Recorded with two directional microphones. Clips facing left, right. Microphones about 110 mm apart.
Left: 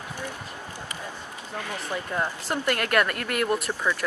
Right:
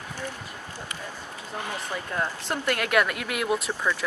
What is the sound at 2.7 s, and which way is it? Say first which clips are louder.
Speech: right 1 dB; centre (ahead or behind).